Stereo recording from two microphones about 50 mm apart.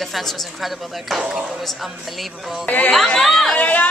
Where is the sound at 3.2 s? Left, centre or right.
Centre.